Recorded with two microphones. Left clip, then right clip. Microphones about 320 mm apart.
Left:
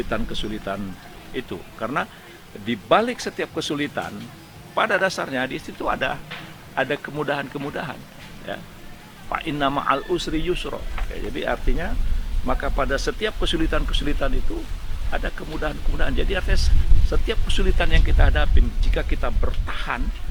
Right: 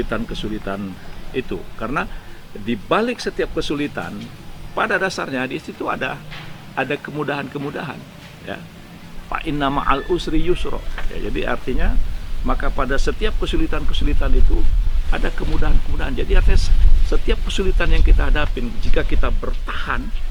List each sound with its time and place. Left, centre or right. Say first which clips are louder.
0.1 s speech: right 2 dB; left